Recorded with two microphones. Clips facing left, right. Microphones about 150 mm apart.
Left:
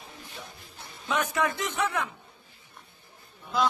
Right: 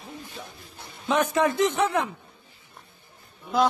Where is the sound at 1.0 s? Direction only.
30° right (ahead or behind).